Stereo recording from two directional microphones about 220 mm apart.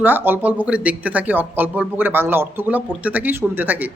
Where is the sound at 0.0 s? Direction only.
10° right (ahead or behind).